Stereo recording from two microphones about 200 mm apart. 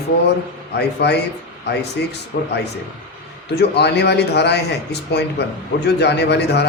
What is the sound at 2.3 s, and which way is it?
Speech, 50° left (ahead or behind).